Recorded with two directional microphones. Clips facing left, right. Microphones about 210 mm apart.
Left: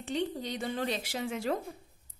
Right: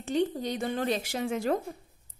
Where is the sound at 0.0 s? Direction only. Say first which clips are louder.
Right 5 dB; 45° right (ahead or behind).